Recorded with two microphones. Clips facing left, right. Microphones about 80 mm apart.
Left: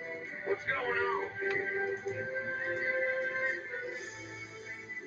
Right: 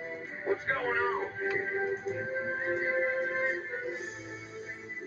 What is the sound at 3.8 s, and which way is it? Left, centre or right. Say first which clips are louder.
Music: right 4 dB; right.